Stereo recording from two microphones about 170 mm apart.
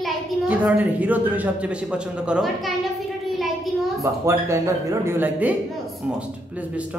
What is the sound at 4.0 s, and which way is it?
A woman's voice, 15° right (ahead or behind).